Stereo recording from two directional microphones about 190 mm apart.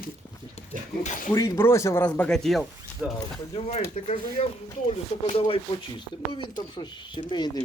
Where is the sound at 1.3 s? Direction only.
20° left (ahead or behind); by 3.4 s centre (ahead or behind).